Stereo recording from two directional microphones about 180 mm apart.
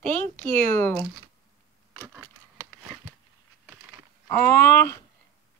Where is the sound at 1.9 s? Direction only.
15° right (ahead or behind).